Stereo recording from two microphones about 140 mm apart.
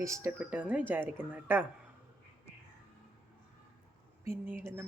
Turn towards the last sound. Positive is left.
turn(degrees=-15)  # may be behind; listen again after turning